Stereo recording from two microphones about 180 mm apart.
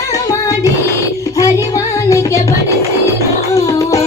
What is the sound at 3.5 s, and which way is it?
Music, 20° left (ahead or behind).